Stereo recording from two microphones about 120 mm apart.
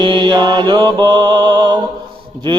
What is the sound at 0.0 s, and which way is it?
Mantra, 40° right (ahead or behind).